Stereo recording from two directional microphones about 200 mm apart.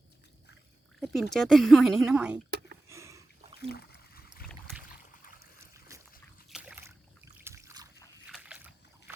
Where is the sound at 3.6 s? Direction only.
55° left (ahead or behind).